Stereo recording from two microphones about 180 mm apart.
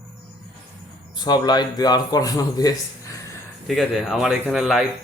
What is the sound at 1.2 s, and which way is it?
A man's voice, 25° left (ahead or behind).